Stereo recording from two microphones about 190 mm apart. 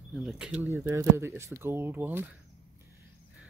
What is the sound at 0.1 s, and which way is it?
Speech, centre (ahead or behind).